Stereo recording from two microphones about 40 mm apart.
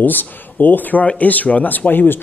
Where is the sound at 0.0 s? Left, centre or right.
Left.